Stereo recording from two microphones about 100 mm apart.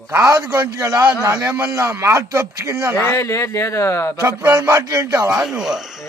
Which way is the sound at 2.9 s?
25° left (ahead or behind).